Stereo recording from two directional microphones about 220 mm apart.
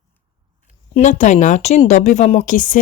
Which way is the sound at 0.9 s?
35° left (ahead or behind).